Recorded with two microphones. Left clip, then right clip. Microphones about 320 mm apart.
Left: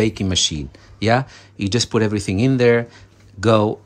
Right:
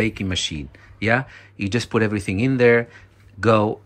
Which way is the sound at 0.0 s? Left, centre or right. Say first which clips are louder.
Left 4 dB; centre.